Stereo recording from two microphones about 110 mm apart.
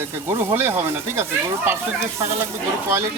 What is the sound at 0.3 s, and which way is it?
Speech, 20° right (ahead or behind).